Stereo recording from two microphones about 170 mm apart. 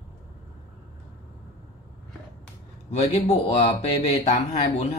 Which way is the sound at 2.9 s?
40° left (ahead or behind).